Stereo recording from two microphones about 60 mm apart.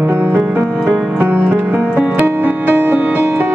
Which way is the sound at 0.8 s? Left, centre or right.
Right.